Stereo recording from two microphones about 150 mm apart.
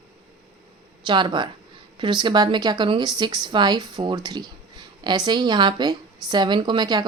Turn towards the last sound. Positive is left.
turn(degrees=-30)  # may be behind; listen again after turning